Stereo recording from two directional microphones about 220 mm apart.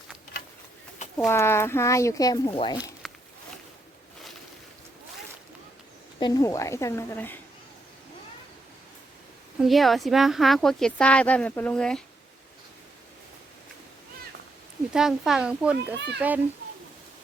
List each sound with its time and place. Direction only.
1.2 s speech: 10° left (ahead or behind)
3.0 s a sound: centre (ahead or behind)
6.1 s speech: 20° left (ahead or behind)
9.6 s speech: centre (ahead or behind)
14.9 s a child's voice: centre (ahead or behind)